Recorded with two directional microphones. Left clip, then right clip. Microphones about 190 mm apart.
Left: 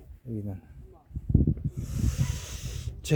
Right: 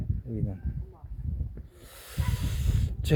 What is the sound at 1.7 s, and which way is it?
Snake, 10° left (ahead or behind).